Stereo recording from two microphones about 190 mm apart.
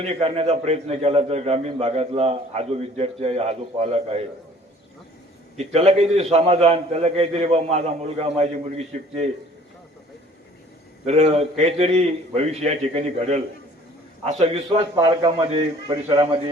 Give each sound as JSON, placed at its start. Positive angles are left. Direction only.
{"t": 0.0, "sound": "a man's voice", "side_deg": -30}
{"t": 5.5, "sound": "a man's voice", "side_deg": -35}
{"t": 11.0, "sound": "a man's voice", "side_deg": -35}